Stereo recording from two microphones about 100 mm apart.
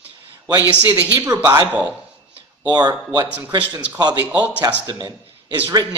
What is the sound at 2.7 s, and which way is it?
Speech, 45° right (ahead or behind).